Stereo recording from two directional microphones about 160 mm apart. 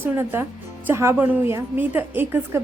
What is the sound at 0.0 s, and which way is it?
A woman's voice, 15° right (ahead or behind).